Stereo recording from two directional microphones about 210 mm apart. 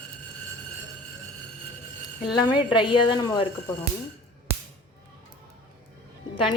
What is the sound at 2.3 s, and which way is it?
Speech, 20° left (ahead or behind).